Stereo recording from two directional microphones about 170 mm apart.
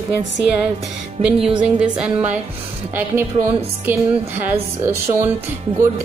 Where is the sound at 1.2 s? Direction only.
5° right (ahead or behind).